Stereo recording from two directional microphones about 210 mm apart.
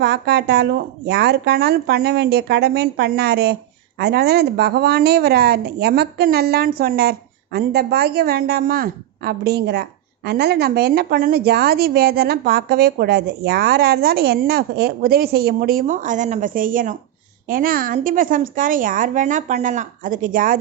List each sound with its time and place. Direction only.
0.0 s a woman's voice: 50° right (ahead or behind)